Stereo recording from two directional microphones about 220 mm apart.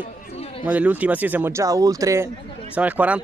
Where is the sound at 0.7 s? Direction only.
5° right (ahead or behind).